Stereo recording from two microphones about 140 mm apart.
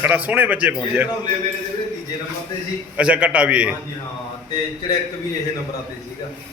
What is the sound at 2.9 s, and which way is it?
Speech, 10° right (ahead or behind).